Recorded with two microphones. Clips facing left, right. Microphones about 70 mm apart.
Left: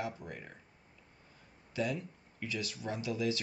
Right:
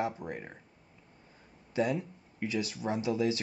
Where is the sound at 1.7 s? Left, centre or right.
Right.